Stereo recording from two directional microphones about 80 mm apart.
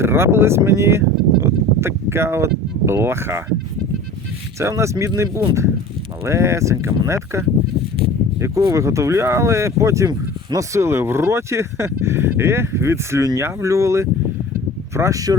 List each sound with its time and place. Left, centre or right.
0.0 s speech: right
4.6 s speech: right
8.7 s speech: right